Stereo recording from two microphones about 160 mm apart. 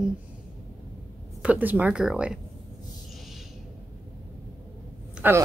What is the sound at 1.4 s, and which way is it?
Speech, 10° right (ahead or behind).